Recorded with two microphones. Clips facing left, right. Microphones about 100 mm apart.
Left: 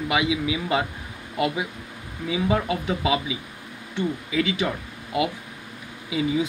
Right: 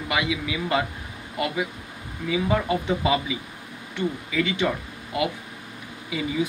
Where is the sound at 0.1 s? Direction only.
15° left (ahead or behind).